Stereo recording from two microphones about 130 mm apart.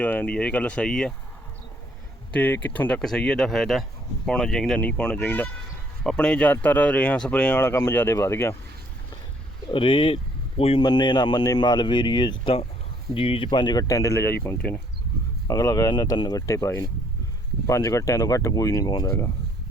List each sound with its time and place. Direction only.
0.0 s speech: 10° left (ahead or behind)
2.3 s speech: 10° left (ahead or behind)
9.7 s speech: 40° left (ahead or behind)
10.8 s speech: 35° left (ahead or behind)